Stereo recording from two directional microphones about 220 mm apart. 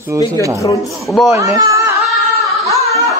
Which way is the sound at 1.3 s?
15° right (ahead or behind).